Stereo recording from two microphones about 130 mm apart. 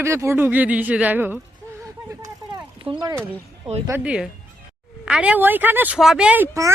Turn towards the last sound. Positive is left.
turn(degrees=-10)  # may be behind; listen again after turning